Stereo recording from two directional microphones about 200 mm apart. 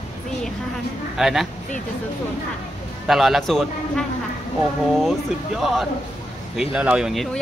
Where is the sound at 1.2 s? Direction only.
Centre (ahead or behind).